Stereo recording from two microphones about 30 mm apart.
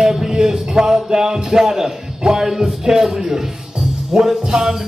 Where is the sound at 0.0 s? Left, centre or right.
Centre.